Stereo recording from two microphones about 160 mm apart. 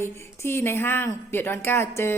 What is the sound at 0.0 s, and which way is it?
Speech, 15° left (ahead or behind).